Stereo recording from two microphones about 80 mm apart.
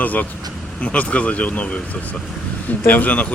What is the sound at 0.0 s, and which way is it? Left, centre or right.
A man's voice, left.